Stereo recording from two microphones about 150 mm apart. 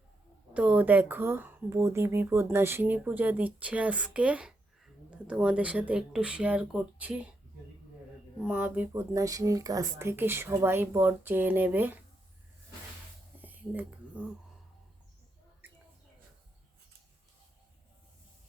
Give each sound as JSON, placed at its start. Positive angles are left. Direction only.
{"t": 0.5, "sound": "speech", "side_deg": -10}
{"t": 8.4, "sound": "speech", "side_deg": -10}
{"t": 13.4, "sound": "whispering", "side_deg": -10}
{"t": 15.6, "sound": "bird", "side_deg": -15}